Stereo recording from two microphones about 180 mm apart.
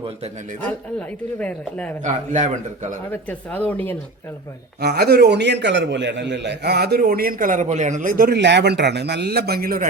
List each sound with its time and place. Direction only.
0.6 s speech: 10° left (ahead or behind)
2.0 s a man's voice: 40° right (ahead or behind)
3.1 s speech: 10° left (ahead or behind)
4.8 s a man's voice: 65° right (ahead or behind)